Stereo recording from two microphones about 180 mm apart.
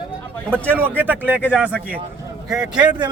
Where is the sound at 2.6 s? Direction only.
25° right (ahead or behind).